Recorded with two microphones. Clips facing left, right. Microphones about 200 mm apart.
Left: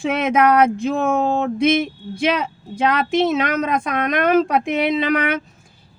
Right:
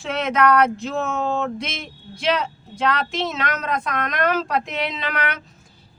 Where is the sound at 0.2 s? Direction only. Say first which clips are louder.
Left 2 dB; 50° left (ahead or behind).